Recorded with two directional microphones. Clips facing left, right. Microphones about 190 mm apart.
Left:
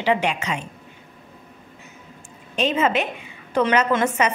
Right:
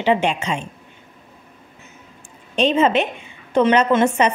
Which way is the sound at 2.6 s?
30° right (ahead or behind).